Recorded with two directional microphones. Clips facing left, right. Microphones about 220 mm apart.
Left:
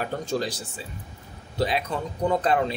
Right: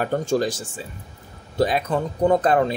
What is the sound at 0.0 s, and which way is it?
Speech, 50° right (ahead or behind).